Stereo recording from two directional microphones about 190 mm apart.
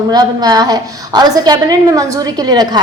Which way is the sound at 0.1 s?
20° right (ahead or behind).